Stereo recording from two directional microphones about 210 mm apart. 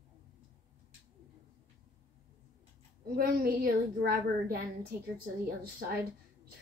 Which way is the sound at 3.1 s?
45° right (ahead or behind).